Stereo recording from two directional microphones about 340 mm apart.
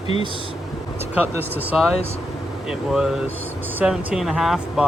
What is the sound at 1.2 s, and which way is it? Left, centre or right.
Speech, centre.